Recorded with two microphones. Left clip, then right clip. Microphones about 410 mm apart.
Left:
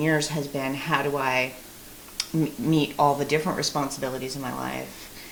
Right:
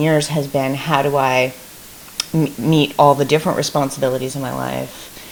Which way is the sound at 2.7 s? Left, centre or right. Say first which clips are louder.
Right 10 dB; right.